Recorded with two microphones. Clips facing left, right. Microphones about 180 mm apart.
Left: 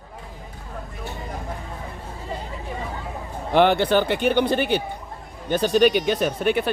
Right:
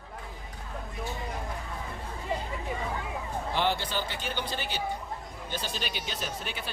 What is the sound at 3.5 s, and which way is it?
Speech, 60° left (ahead or behind).